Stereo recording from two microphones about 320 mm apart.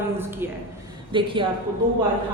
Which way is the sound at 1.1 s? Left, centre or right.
Centre.